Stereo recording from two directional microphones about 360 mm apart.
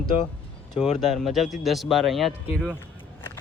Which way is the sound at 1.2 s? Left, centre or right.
Centre.